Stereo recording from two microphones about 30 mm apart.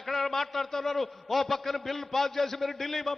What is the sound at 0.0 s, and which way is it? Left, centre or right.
A man's voice, centre.